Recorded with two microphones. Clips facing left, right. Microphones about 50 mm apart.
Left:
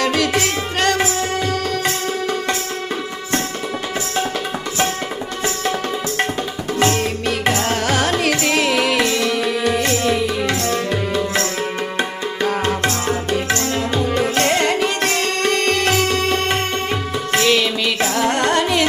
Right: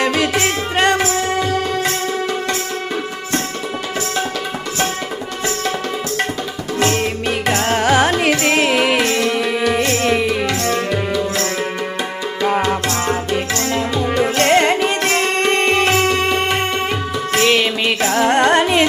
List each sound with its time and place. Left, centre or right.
0.0 s music: right
6.8 s music: centre
7.6 s carnatic music: right
9.6 s music: right
12.9 s music: right